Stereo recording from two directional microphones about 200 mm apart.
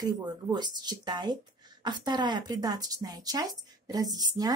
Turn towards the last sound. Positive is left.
turn(degrees=-20)  # may be behind; listen again after turning